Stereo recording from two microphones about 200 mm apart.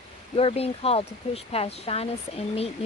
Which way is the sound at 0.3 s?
30° left (ahead or behind).